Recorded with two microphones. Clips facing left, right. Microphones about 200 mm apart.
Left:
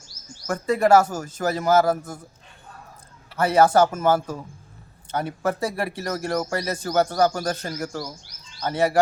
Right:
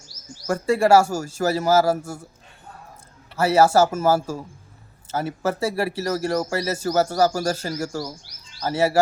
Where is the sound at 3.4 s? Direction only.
5° right (ahead or behind).